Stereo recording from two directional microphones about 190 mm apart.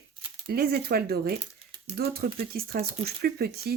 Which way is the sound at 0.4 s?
50° right (ahead or behind).